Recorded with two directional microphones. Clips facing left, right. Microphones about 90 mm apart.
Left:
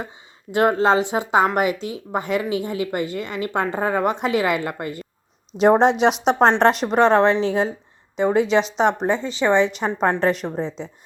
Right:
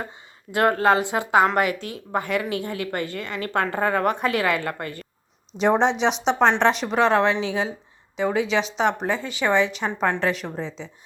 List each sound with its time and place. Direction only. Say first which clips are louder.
0.5 s speech: left 2 dB; 20° left (ahead or behind)
5.5 s a woman's voice: left 5 dB; 45° left (ahead or behind)